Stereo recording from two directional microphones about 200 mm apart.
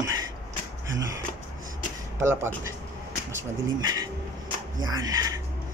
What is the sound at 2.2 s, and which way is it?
Speech, 10° right (ahead or behind).